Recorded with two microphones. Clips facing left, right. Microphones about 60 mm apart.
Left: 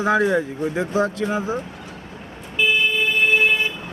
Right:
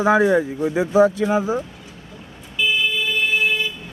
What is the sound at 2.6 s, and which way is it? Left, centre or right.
Vehicle, left.